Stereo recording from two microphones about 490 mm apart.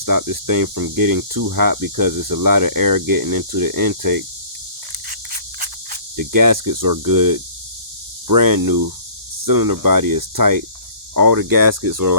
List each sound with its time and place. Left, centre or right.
0.0 s speech: right
5.5 s speech: right